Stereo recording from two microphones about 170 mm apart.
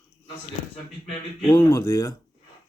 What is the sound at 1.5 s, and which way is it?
Speech, 20° left (ahead or behind).